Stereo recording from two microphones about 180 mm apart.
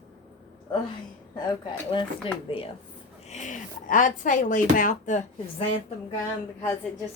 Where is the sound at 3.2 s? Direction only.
40° left (ahead or behind).